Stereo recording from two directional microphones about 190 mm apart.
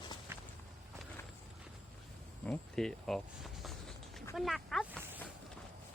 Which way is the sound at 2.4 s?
5° left (ahead or behind).